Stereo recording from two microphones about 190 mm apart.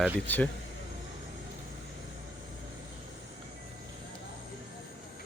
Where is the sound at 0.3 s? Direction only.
10° left (ahead or behind).